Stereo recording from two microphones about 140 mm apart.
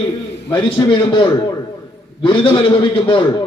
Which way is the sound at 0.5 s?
35° left (ahead or behind).